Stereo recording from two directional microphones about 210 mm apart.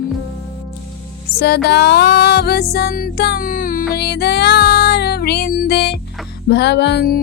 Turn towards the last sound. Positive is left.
turn(degrees=50)  # may be behind; listen again after turning